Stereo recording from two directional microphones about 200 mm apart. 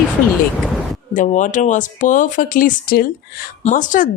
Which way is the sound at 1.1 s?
40° left (ahead or behind).